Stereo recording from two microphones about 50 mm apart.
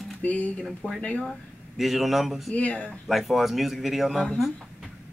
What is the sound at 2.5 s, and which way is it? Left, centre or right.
Speech, left.